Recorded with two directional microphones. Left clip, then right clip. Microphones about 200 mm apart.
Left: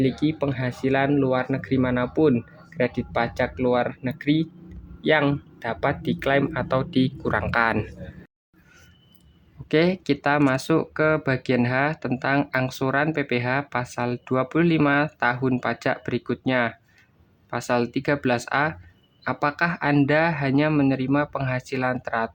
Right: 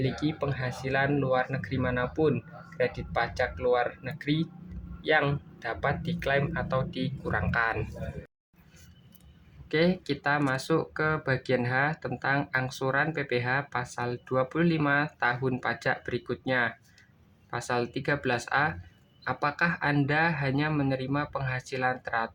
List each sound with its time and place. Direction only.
0.0 s speech: 45° left (ahead or behind)
9.6 s speech: 45° left (ahead or behind)